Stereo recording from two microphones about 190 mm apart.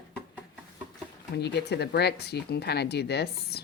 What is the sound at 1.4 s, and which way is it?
Speech, 60° left (ahead or behind).